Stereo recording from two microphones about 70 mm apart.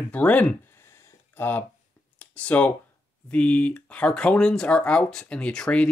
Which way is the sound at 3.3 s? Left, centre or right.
Centre.